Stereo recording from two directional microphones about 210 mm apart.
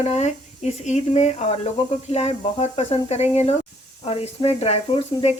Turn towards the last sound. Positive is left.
turn(degrees=30)  # may be behind; listen again after turning